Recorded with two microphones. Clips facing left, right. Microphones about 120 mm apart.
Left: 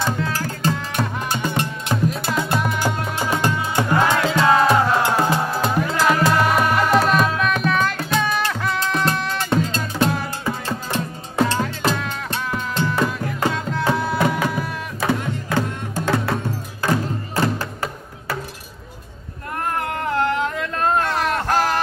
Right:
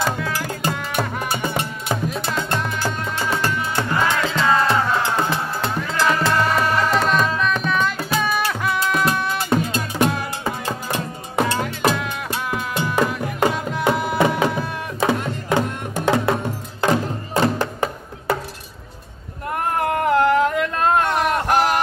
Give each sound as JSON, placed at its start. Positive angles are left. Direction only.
{"t": 0.0, "sound": "music", "side_deg": -15}
{"t": 1.9, "sound": "music", "side_deg": 0}
{"t": 19.8, "sound": "cat", "side_deg": -25}
{"t": 21.0, "sound": "a sound", "side_deg": -20}